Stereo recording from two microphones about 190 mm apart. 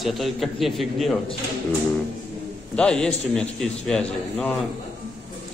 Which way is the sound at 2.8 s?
5° left (ahead or behind).